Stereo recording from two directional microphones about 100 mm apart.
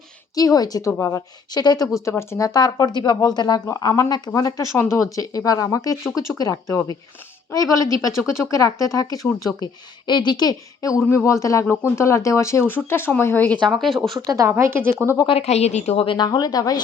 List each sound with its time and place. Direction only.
0.3 s speech: 40° left (ahead or behind)
2.0 s speech: 30° left (ahead or behind)
10.1 s speech: 50° left (ahead or behind); by 13.6 s 20° left (ahead or behind)
13.7 s speech: 5° left (ahead or behind)
14.3 s a woman's voice: 30° right (ahead or behind)
15.3 s a woman's voice: 90° left
16.1 s speech: 45° left (ahead or behind)